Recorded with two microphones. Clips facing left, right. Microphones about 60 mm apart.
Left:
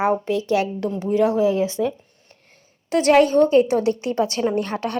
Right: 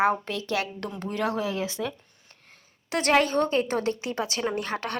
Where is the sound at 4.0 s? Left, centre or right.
Right.